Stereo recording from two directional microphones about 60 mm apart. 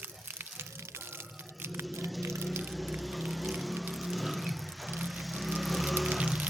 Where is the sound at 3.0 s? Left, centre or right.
Centre.